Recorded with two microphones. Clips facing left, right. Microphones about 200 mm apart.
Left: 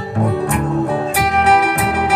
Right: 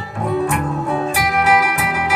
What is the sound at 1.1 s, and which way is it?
Music, 60° left (ahead or behind).